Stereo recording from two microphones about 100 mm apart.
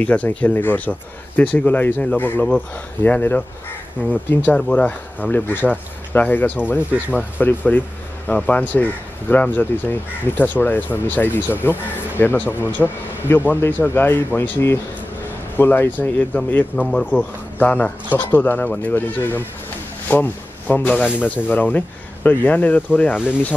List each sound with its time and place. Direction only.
0.0 s speech: 15° left (ahead or behind)
23.1 s speech: 10° right (ahead or behind)